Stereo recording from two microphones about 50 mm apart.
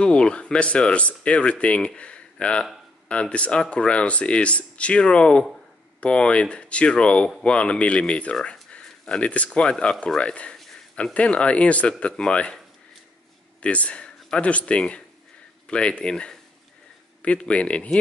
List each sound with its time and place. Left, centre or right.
0.0 s speech: left
10.5 s a sound: centre
11.1 s speech: left
13.6 s speech: left